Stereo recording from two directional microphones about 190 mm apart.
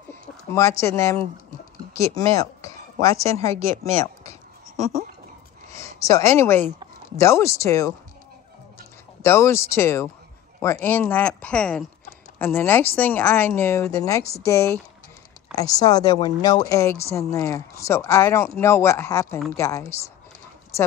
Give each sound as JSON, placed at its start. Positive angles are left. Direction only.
{"t": 0.1, "sound": "speech", "side_deg": 15}
{"t": 4.0, "sound": "a sound", "side_deg": 15}
{"t": 5.7, "sound": "speech", "side_deg": 15}
{"t": 9.2, "sound": "speech", "side_deg": 15}